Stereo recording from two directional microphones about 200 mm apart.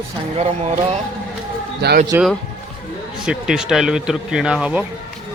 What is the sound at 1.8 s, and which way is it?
Speech, 50° right (ahead or behind).